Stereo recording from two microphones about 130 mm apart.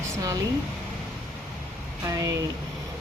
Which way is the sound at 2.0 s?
25° right (ahead or behind).